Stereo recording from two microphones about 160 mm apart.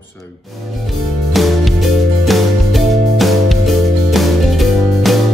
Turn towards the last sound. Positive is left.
turn(degrees=0)  # may be behind; listen again after turning